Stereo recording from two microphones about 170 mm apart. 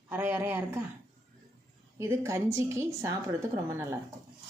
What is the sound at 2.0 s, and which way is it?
Speech, 15° right (ahead or behind).